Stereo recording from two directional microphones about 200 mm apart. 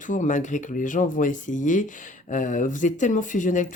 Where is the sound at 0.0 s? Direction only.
40° left (ahead or behind).